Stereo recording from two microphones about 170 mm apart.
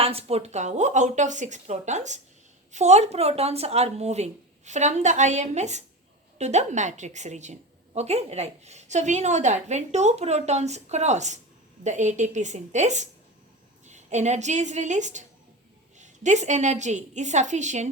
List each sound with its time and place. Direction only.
0.0 s a woman's voice: 35° right (ahead or behind)